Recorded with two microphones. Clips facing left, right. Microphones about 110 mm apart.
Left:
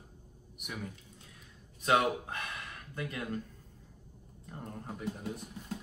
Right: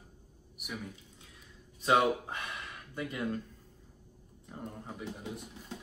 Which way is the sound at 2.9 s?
10° right (ahead or behind).